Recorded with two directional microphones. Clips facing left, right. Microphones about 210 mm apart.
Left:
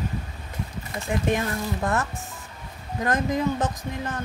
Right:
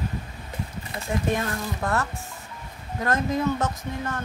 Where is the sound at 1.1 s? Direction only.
10° left (ahead or behind).